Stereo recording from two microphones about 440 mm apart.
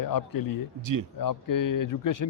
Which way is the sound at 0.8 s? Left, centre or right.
Right.